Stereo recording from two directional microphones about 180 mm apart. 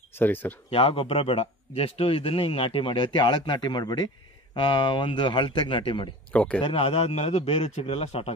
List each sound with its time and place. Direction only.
0.1 s speech: 10° left (ahead or behind)
0.7 s a man's voice: 30° left (ahead or behind)
6.3 s speech: 5° left (ahead or behind)
6.6 s speech: 30° left (ahead or behind)